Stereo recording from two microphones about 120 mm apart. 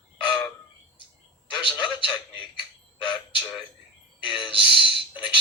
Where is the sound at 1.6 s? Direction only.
40° left (ahead or behind).